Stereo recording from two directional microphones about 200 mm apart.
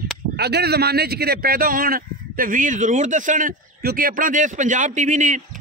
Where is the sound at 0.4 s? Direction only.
55° right (ahead or behind).